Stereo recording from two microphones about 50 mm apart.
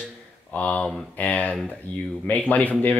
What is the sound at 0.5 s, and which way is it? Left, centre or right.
Speech, left.